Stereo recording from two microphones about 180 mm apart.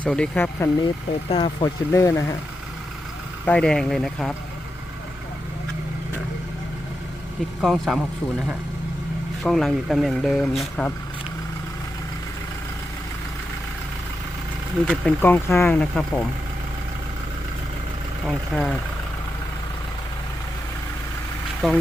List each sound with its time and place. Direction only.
0.0 s speech: 5° left (ahead or behind)
1.3 s speech: 25° left (ahead or behind)
3.4 s speech: 5° left (ahead or behind)
7.6 s speech: centre (ahead or behind)
9.4 s speech: centre (ahead or behind)
14.8 s speech: 5° left (ahead or behind)
18.3 s speech: centre (ahead or behind)
21.6 s speech: centre (ahead or behind)